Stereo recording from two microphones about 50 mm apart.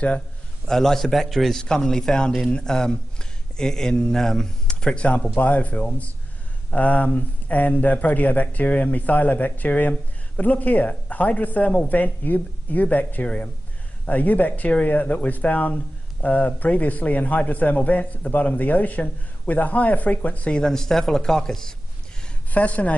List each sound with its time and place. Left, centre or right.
0.7 s a man's voice: centre; by 20.5 s left
20.5 s speech: centre
22.5 s a woman's voice: left